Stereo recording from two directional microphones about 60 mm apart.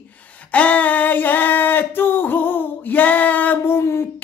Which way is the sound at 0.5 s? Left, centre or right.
Left.